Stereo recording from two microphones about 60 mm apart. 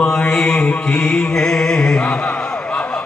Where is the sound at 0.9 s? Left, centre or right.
Centre.